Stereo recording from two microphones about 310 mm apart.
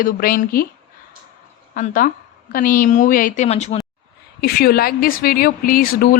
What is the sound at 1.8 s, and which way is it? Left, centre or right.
A woman's voice, left.